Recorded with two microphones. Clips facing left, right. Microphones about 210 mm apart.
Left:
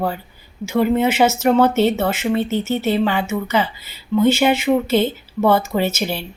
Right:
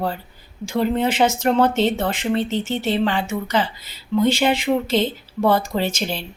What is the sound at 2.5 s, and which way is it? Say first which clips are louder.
Speech: left 3 dB; 30° right (ahead or behind).